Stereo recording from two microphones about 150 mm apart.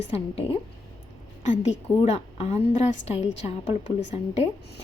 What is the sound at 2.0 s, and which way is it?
A woman's voice, 40° left (ahead or behind).